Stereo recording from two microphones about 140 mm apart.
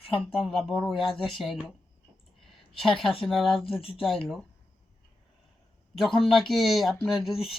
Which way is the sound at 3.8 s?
40° left (ahead or behind).